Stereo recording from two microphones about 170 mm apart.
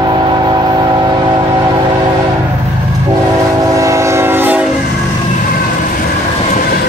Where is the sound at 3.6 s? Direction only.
20° right (ahead or behind).